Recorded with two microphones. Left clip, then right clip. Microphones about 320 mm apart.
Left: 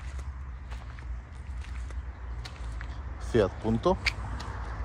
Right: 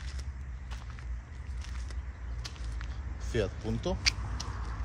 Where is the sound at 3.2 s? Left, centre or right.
Centre.